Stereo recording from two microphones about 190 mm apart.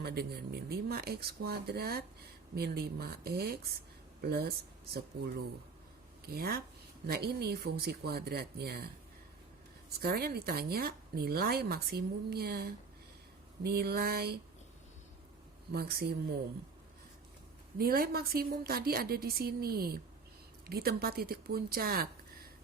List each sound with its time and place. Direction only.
0.0 s a woman's voice: 60° right (ahead or behind)
10.0 s speech: 55° right (ahead or behind)
15.7 s speech: 55° right (ahead or behind)
17.7 s a woman's voice: 50° right (ahead or behind)